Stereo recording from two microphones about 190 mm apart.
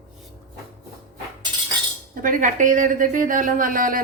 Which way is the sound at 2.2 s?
45° right (ahead or behind).